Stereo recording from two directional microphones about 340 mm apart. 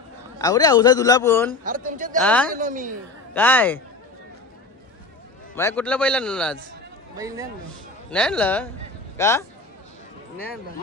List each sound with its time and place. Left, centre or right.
0.4 s a man's voice: centre
1.6 s a man's voice: right
2.1 s a man's voice: centre
2.5 s a man's voice: right
3.3 s a man's voice: centre
5.6 s a man's voice: centre
7.2 s a man's voice: centre
8.1 s a man's voice: centre